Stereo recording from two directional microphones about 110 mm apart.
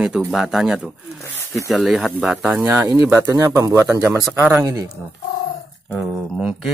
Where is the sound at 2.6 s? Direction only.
20° right (ahead or behind).